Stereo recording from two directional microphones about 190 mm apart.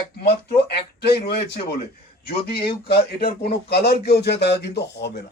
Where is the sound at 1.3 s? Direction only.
60° left (ahead or behind).